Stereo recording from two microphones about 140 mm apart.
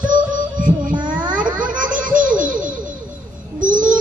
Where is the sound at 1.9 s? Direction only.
70° right (ahead or behind).